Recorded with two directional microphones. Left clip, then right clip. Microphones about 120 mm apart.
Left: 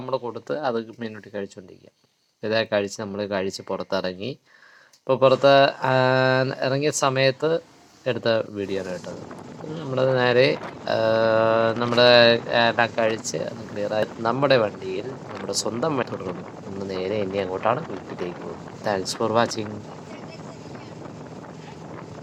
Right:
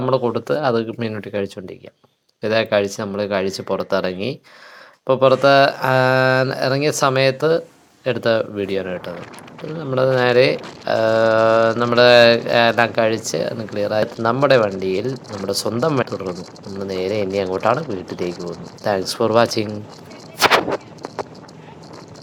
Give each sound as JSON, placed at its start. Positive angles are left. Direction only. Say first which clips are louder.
{"t": 0.0, "sound": "speech", "louder": "right 9 dB", "side_deg": -35}
{"t": 18.9, "sound": "speech", "louder": "right 6 dB", "side_deg": -40}